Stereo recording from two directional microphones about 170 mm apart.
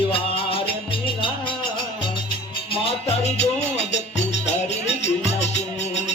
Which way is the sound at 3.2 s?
40° left (ahead or behind).